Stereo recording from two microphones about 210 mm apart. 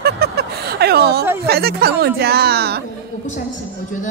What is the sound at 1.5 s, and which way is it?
A woman's voice, 50° right (ahead or behind).